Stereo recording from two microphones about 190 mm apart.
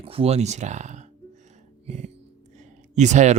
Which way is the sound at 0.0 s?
30° right (ahead or behind).